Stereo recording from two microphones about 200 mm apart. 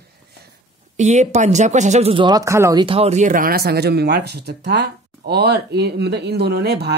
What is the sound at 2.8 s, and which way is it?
Speech, 30° right (ahead or behind).